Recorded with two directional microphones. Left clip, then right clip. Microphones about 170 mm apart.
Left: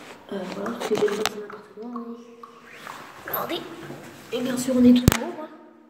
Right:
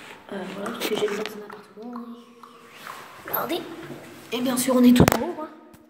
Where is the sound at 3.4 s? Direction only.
25° right (ahead or behind).